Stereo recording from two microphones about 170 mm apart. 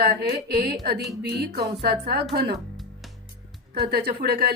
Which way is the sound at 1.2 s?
70° right (ahead or behind).